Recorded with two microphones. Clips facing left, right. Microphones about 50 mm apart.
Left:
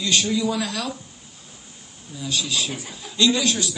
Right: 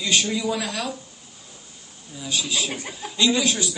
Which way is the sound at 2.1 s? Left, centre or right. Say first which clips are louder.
Left 1 dB; centre.